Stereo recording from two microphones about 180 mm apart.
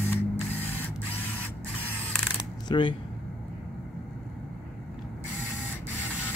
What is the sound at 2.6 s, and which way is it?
Speech, 25° left (ahead or behind).